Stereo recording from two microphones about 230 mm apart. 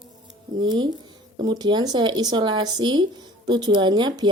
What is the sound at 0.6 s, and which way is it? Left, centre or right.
Speech, centre.